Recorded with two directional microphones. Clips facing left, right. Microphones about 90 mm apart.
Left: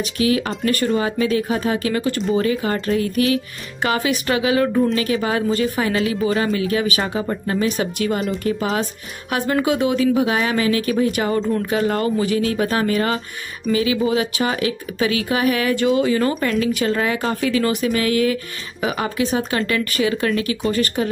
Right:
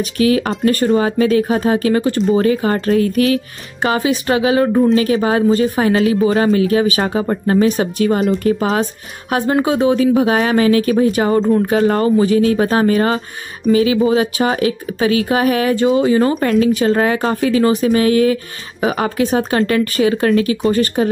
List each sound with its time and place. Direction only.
0.0 s speech: 40° right (ahead or behind)
3.8 s speech: 30° right (ahead or behind)